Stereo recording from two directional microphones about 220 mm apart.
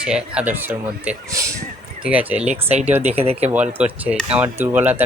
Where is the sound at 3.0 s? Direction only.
30° right (ahead or behind).